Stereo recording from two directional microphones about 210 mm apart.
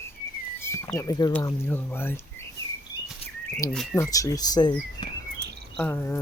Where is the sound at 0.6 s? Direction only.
15° left (ahead or behind).